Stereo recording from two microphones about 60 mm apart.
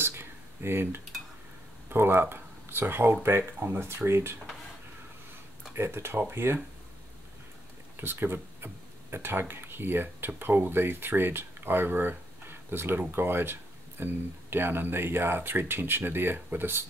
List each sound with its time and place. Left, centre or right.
0.0 s a sound: right
1.9 s speech: right
5.8 s speech: right
8.0 s speech: right